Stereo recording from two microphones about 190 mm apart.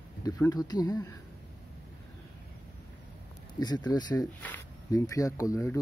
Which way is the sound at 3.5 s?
20° left (ahead or behind).